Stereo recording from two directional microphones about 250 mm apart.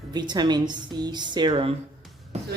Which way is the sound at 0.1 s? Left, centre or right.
Centre.